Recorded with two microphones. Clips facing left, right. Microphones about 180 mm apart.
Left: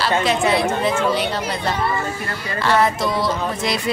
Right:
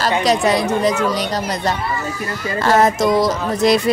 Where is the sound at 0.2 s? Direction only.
40° right (ahead or behind).